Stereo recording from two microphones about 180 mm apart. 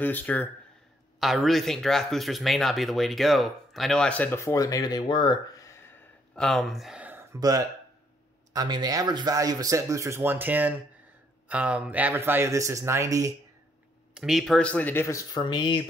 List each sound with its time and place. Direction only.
0.0 s speech: 10° left (ahead or behind); by 7.2 s 10° right (ahead or behind)
7.3 s speech: 20° right (ahead or behind)
14.1 s speech: centre (ahead or behind); by 15.8 s 25° left (ahead or behind)